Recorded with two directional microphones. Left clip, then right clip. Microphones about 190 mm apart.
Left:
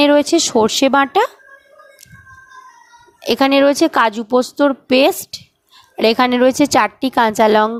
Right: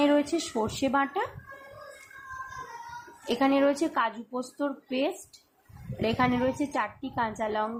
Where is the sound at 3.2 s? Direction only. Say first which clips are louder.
Left 12 dB; 50° left (ahead or behind).